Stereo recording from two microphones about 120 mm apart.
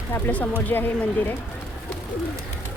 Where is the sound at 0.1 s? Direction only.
15° left (ahead or behind).